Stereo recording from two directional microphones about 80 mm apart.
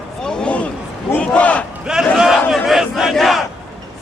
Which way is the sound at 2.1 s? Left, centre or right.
Centre.